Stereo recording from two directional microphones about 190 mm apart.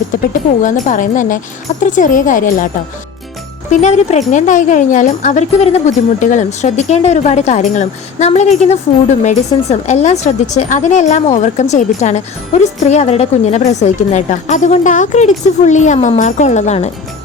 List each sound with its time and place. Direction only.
0.6 s speech: 45° left (ahead or behind)
3.7 s speech: 35° left (ahead or behind)